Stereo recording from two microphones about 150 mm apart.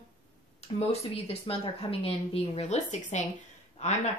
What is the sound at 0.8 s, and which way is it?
A woman's voice, 40° left (ahead or behind).